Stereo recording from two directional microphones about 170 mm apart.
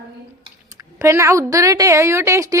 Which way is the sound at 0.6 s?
15° right (ahead or behind).